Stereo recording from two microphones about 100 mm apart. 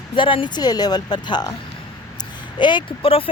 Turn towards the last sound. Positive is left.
turn(degrees=50)  # may be behind; listen again after turning